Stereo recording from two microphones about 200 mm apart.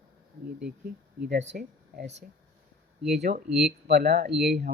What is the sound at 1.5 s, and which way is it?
Speech, 55° right (ahead or behind).